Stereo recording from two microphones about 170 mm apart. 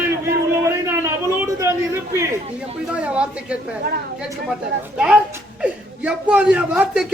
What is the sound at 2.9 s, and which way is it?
Speech, 5° right (ahead or behind).